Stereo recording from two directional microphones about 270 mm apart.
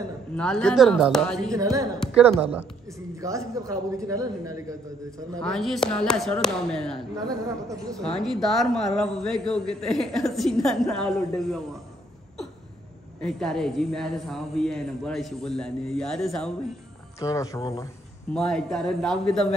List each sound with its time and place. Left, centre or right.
0.4 s a man's voice: centre
1.5 s a man's voice: centre
2.0 s a man's voice: centre
2.4 s a man's voice: centre
5.4 s a man's voice: centre
7.2 s a man's voice: centre
8.2 s a man's voice: centre
13.2 s a man's voice: centre
17.2 s speech: centre
18.3 s a man's voice: centre